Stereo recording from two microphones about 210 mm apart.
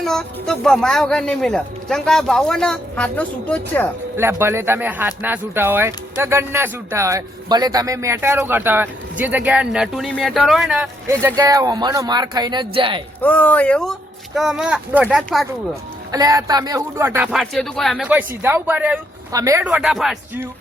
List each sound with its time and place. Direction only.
0.0 s speech: centre (ahead or behind)
4.2 s speech: 10° right (ahead or behind)
13.2 s speech: 5° left (ahead or behind)
16.1 s speech: 15° right (ahead or behind)
17.3 s speech: centre (ahead or behind)